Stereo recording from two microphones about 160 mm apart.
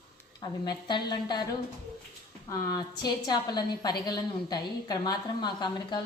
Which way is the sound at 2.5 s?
25° left (ahead or behind).